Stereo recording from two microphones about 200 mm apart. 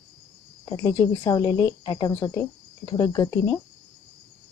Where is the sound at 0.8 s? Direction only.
20° left (ahead or behind).